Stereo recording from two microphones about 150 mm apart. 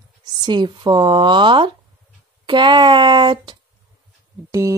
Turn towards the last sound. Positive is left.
turn(degrees=-20)  # may be behind; listen again after turning